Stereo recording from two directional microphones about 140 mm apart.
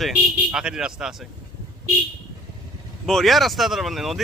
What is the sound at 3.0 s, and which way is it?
Speech, centre (ahead or behind).